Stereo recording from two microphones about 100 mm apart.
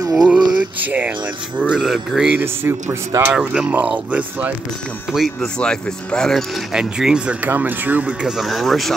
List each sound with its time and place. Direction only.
0.1 s a sound: 10° right (ahead or behind)
0.7 s speech: 15° right (ahead or behind)
1.7 s speech: 5° right (ahead or behind)
2.3 s speech: 25° right (ahead or behind)
3.3 s speech: 5° right (ahead or behind)
5.1 s speech: 5° right (ahead or behind)